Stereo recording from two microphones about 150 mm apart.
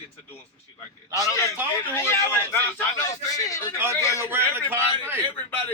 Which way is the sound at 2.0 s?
15° left (ahead or behind).